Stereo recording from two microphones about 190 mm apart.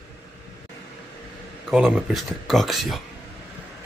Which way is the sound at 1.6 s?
Centre (ahead or behind).